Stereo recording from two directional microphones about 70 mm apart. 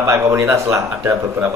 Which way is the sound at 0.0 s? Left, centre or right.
Right.